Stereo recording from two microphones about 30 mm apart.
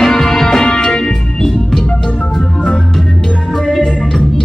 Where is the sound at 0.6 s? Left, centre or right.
Left.